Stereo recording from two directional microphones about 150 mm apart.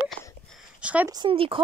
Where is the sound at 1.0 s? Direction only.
30° right (ahead or behind).